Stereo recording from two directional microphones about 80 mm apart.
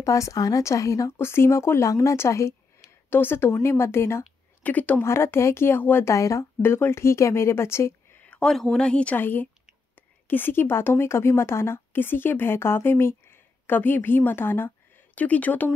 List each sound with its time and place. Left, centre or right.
0.0 s a woman's voice: left
1.1 s speech: left
3.1 s a woman's voice: left
4.6 s a woman's voice: left
5.0 s speech: left
6.1 s speech: left
6.6 s speech: left
8.3 s a woman's voice: centre